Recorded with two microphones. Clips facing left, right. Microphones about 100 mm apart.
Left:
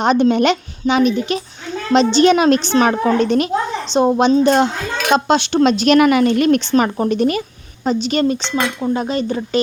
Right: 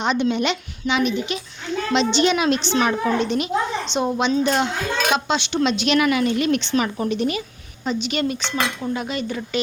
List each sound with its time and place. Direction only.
0.0 s a woman's voice: 45° left (ahead or behind)
7.9 s cutlery: 35° left (ahead or behind)